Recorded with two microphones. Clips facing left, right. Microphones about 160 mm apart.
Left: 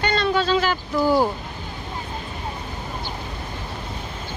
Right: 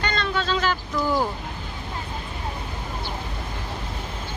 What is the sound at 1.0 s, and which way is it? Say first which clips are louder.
Speech: left 5 dB; 30° left (ahead or behind).